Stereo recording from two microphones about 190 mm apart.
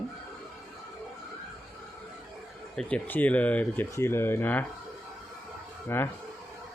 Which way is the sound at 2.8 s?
5° left (ahead or behind).